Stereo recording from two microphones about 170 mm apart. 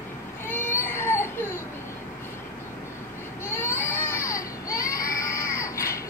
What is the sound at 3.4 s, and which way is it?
Baby cry, 15° left (ahead or behind).